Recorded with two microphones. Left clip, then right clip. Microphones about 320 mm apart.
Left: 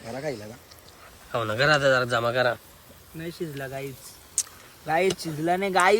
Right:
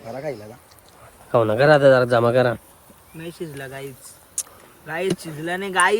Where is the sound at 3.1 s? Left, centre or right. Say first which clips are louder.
Right 1 dB; centre.